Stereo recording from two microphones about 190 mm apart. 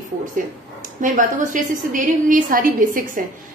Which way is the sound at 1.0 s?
45° right (ahead or behind).